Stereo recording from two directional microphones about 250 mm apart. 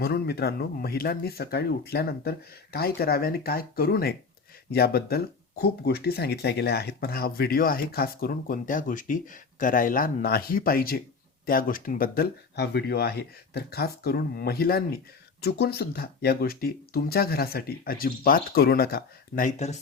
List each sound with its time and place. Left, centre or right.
0.0 s speech: left